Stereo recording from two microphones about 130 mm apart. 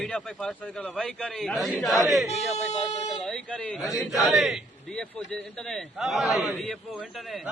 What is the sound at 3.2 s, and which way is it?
A man's voice, 10° left (ahead or behind).